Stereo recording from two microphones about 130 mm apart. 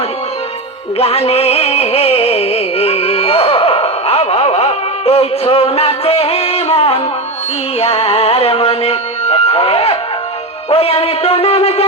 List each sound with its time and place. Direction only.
0.9 s music: 50° left (ahead or behind)
10.7 s a man's voice: 50° left (ahead or behind)